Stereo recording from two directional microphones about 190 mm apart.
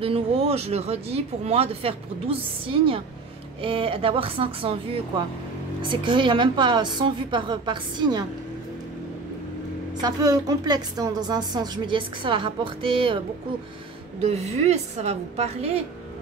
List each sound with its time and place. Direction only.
0.0 s a woman's voice: 30° right (ahead or behind)
10.0 s a woman's voice: 20° right (ahead or behind)
14.2 s speech: 35° right (ahead or behind)